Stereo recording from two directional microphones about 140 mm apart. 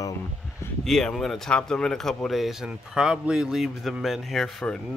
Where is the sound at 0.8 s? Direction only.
5° left (ahead or behind).